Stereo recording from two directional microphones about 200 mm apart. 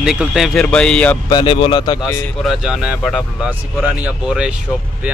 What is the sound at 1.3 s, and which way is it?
Speech, 25° left (ahead or behind).